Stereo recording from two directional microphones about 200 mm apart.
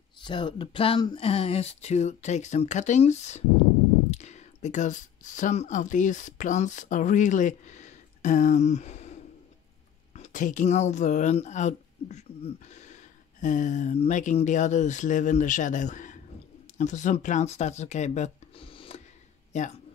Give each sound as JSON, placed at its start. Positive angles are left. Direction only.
{"t": 0.2, "sound": "speech", "side_deg": 25}
{"t": 10.1, "sound": "speech", "side_deg": 40}
{"t": 19.5, "sound": "speech", "side_deg": 35}